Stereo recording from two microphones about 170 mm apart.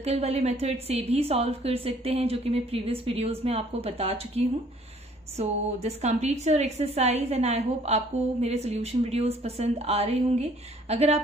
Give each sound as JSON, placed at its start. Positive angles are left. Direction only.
{"t": 0.0, "sound": "a woman's voice", "side_deg": -40}